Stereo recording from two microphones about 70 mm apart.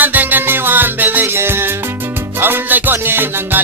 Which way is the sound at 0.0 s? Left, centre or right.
Right.